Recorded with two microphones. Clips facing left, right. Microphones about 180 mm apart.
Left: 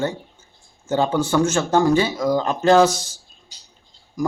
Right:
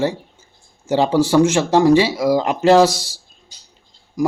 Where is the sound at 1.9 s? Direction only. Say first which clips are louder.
Right 5 dB; 80° right.